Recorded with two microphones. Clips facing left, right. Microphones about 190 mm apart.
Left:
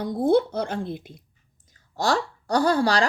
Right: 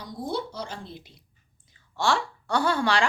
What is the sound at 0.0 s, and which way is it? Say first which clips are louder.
Speech: left 12 dB; 55° left (ahead or behind).